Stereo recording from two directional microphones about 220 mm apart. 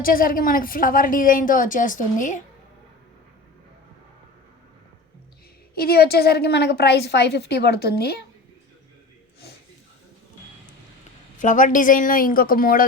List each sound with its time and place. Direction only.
0.0 s a woman's voice: 40° left (ahead or behind)
5.7 s a woman's voice: 45° left (ahead or behind)
11.3 s a woman's voice: 35° left (ahead or behind)